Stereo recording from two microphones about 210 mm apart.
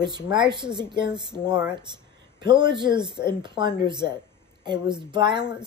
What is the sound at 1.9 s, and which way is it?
Speech, 20° right (ahead or behind).